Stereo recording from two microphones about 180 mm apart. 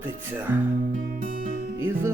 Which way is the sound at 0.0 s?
10° right (ahead or behind).